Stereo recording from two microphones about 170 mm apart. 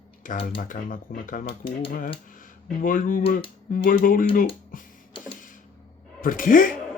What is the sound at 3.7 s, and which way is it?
Speech, 55° left (ahead or behind).